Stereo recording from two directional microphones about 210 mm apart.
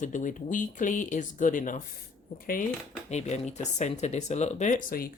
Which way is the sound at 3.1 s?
35° left (ahead or behind).